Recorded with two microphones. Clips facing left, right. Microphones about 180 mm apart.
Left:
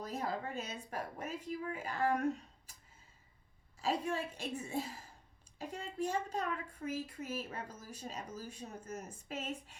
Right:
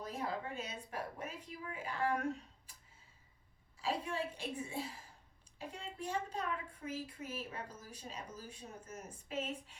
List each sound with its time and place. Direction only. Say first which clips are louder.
0.0 s speech: left 2 dB; 45° left (ahead or behind)
3.8 s speech: left 3 dB; 45° left (ahead or behind)